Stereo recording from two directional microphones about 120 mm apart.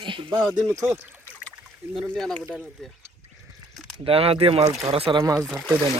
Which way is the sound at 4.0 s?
50° right (ahead or behind).